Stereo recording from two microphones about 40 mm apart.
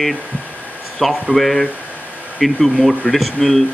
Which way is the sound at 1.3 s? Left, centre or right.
Centre.